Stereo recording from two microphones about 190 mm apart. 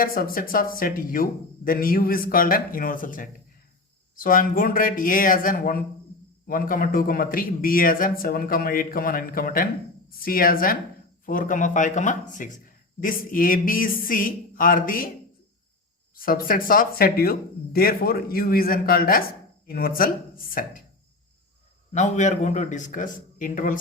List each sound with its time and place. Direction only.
0.0 s a man's voice: 50° left (ahead or behind)
16.1 s speech: 50° left (ahead or behind)
21.9 s a man's voice: 40° left (ahead or behind)